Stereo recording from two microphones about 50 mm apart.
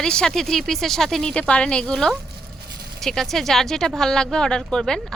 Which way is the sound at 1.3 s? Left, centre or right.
Left.